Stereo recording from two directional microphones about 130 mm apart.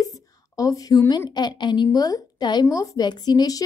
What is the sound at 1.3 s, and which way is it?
A woman's voice, 35° left (ahead or behind).